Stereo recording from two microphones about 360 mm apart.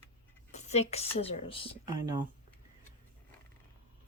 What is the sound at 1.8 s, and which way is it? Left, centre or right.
Speech, centre.